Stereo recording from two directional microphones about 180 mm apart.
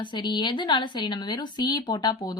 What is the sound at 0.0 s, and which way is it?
Speech, 25° left (ahead or behind).